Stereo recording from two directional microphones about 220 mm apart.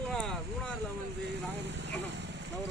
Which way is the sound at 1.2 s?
50° right (ahead or behind).